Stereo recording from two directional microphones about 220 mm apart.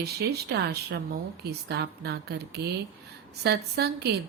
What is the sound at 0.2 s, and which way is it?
Speech, 50° right (ahead or behind).